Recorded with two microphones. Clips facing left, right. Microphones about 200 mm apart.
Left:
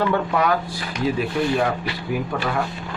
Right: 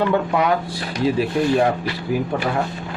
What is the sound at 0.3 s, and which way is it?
Speech, 20° right (ahead or behind).